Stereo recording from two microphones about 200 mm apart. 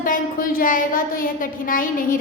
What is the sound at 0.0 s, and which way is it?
A woman's voice, 45° left (ahead or behind).